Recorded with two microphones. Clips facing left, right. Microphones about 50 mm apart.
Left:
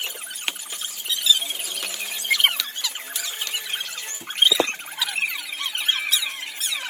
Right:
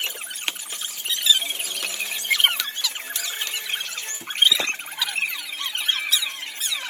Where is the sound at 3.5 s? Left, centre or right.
Centre.